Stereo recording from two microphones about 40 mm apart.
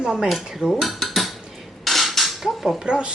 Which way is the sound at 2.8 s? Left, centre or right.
Right.